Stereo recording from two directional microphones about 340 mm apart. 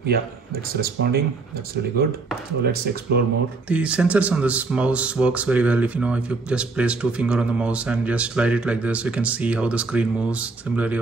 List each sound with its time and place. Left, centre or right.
0.7 s speech: right
2.6 s speech: right
3.6 s speech: centre